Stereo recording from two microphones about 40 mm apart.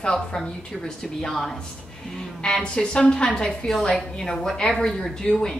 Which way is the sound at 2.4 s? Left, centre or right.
Left.